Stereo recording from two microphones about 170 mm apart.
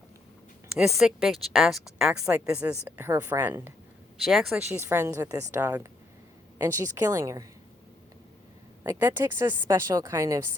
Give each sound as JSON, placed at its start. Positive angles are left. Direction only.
{"t": 0.8, "sound": "a woman's voice", "side_deg": 0}
{"t": 4.2, "sound": "a woman's voice", "side_deg": 0}
{"t": 4.7, "sound": "a woman's voice", "side_deg": -15}
{"t": 8.8, "sound": "a woman's voice", "side_deg": -15}